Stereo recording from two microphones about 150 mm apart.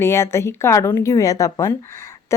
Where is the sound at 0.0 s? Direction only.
15° left (ahead or behind).